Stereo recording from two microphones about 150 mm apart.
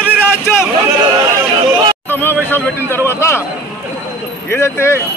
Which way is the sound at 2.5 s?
15° left (ahead or behind).